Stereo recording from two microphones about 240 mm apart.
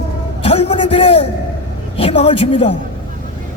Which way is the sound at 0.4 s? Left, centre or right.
Left.